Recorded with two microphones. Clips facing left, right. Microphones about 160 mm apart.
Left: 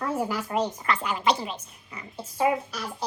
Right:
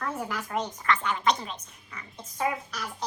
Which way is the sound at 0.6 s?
30° left (ahead or behind).